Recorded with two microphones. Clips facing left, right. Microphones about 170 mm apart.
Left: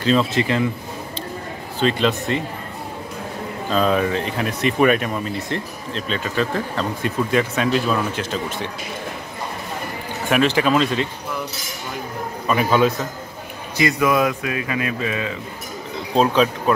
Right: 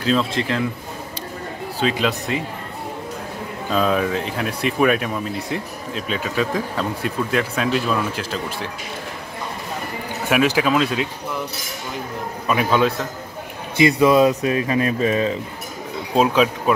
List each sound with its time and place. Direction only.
0.0 s speech: centre (ahead or behind)
1.8 s speech: 5° right (ahead or behind)
3.7 s speech: centre (ahead or behind)
10.3 s speech: 5° right (ahead or behind)
12.4 s speech: centre (ahead or behind)
13.7 s speech: 25° right (ahead or behind)
16.2 s speech: 5° right (ahead or behind)